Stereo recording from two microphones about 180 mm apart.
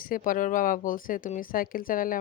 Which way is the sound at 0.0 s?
50° left (ahead or behind).